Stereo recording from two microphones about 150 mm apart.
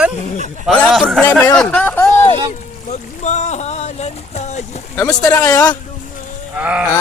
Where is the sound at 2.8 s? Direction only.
50° left (ahead or behind).